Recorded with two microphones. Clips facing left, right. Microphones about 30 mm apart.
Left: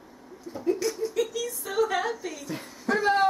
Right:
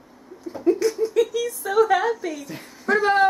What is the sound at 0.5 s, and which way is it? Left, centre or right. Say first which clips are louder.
Speech: right 7 dB; centre.